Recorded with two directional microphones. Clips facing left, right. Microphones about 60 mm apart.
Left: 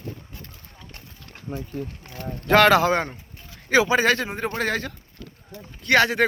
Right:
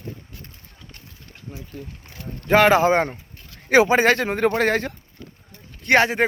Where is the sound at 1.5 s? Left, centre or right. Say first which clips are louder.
Left 5 dB; left.